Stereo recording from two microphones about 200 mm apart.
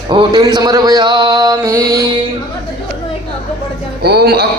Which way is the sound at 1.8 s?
15° right (ahead or behind).